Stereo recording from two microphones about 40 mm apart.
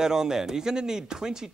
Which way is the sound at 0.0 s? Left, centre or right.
Centre.